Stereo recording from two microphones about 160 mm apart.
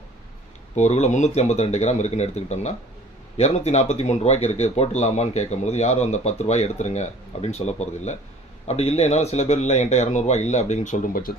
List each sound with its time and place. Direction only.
0.8 s speech: 45° left (ahead or behind)